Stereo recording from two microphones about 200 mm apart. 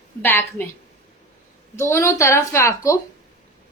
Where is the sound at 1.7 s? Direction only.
15° left (ahead or behind).